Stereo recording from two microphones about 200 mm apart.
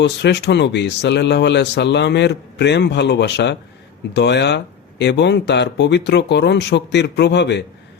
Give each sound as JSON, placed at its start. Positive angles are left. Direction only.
{"t": 0.0, "sound": "speech", "side_deg": 60}